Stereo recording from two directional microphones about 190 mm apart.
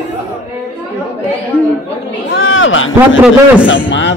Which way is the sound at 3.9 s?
70° left (ahead or behind).